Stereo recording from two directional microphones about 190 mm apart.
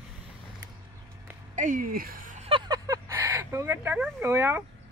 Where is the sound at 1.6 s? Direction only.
45° right (ahead or behind).